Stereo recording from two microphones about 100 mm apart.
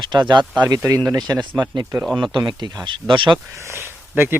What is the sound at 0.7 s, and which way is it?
Speech, 35° right (ahead or behind).